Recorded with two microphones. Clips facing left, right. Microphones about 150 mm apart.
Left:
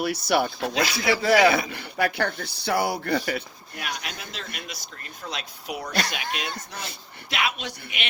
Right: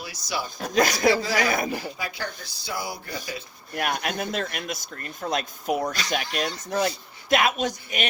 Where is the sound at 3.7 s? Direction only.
55° right (ahead or behind).